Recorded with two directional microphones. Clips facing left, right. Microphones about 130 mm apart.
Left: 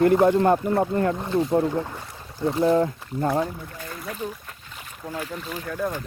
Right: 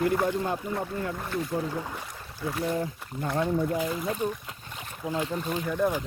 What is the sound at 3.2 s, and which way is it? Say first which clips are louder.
Speech: left 5 dB; 35° left (ahead or behind).